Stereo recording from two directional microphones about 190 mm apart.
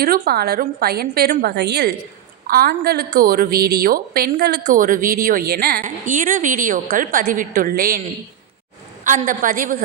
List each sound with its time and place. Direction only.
0.0 s a woman's voice: 55° right (ahead or behind)
2.5 s a woman's voice: 50° right (ahead or behind)
4.6 s a woman's voice: 45° right (ahead or behind)
9.0 s a woman's voice: 45° right (ahead or behind)